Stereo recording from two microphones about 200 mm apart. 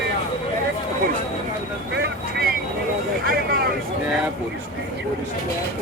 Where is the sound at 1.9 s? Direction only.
55° right (ahead or behind).